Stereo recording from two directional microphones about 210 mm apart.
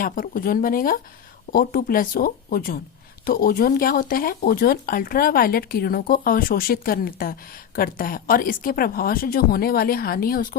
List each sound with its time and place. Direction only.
0.0 s speech: 40° left (ahead or behind)